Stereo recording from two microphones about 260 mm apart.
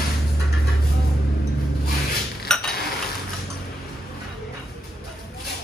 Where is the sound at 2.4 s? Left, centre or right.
Centre.